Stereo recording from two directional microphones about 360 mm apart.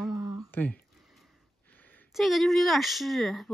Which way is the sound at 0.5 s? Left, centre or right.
Centre.